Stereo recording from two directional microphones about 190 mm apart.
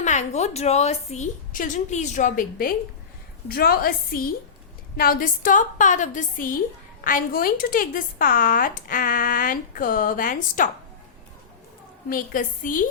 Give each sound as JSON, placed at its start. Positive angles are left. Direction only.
{"t": 0.0, "sound": "a woman's voice", "side_deg": 40}
{"t": 12.0, "sound": "speech", "side_deg": 45}